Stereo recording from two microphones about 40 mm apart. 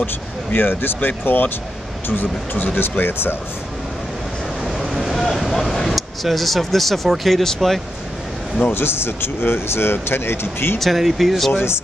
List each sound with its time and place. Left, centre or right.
0.0 s speech: left
2.5 s speech: left
4.9 s vehicle: centre
5.2 s speech: centre
8.7 s speech: left
10.8 s speech: centre